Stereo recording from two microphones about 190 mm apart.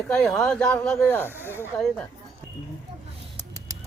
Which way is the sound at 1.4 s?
10° right (ahead or behind).